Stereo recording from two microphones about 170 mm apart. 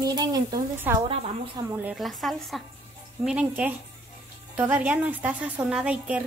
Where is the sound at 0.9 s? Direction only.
10° right (ahead or behind).